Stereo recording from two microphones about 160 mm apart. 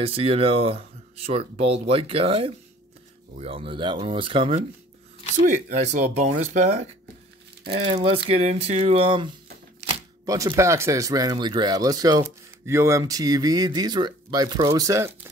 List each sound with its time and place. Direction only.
0.0 s speech: 35° right (ahead or behind)
5.4 s speech: 50° right (ahead or behind)
7.8 s speech: 35° right (ahead or behind)
10.2 s speech: 20° right (ahead or behind)